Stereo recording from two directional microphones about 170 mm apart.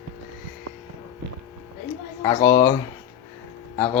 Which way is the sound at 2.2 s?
20° left (ahead or behind).